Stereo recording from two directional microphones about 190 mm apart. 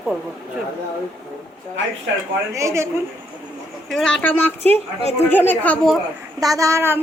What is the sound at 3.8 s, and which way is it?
Speech, centre (ahead or behind).